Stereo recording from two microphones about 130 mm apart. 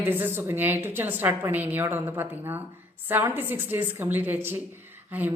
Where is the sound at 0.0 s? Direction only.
15° right (ahead or behind).